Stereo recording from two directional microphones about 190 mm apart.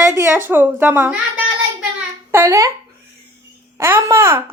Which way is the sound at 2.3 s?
15° right (ahead or behind).